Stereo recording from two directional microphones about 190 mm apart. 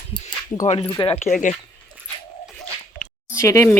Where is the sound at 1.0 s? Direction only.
30° left (ahead or behind).